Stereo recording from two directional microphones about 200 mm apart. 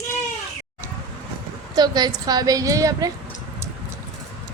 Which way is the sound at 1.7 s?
20° right (ahead or behind).